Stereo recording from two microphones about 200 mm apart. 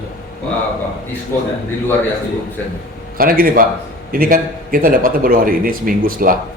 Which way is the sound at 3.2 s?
45° right (ahead or behind).